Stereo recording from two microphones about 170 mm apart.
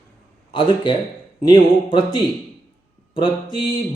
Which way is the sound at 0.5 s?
30° left (ahead or behind).